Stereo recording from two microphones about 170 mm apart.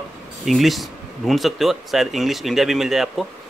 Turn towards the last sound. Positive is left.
turn(degrees=0)  # may be behind; listen again after turning